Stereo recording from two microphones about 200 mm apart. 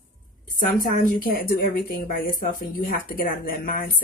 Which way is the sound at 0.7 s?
40° left (ahead or behind).